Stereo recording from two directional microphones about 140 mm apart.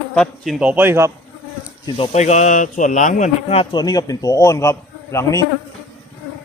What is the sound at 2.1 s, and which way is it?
Speech, 55° left (ahead or behind).